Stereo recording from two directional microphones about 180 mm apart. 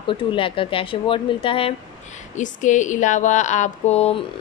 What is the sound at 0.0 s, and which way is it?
Speech, 30° left (ahead or behind).